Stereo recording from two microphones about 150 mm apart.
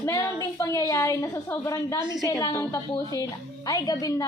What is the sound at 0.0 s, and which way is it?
A woman's voice, 25° left (ahead or behind).